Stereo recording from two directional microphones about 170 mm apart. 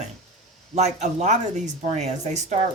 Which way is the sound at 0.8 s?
45° right (ahead or behind).